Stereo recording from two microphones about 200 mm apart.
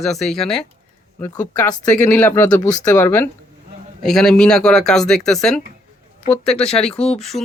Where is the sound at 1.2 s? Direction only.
15° left (ahead or behind).